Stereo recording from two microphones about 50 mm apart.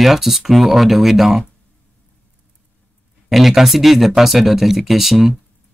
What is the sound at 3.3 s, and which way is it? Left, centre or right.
Speech, centre.